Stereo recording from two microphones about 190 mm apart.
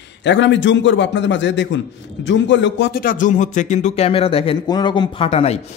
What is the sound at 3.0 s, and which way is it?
Speech, 45° left (ahead or behind).